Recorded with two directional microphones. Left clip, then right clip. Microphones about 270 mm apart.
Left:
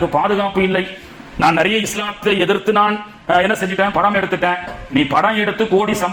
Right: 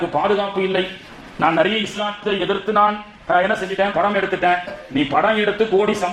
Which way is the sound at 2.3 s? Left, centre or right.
Left.